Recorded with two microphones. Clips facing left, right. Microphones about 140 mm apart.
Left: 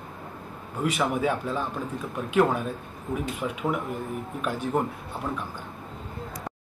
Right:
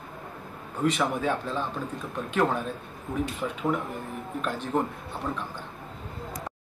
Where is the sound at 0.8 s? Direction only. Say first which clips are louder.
Even; 10° left (ahead or behind).